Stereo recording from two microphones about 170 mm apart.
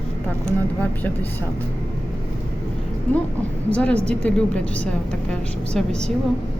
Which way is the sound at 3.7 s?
5° left (ahead or behind).